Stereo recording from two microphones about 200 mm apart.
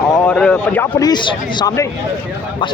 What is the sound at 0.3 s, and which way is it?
Speech, 5° left (ahead or behind).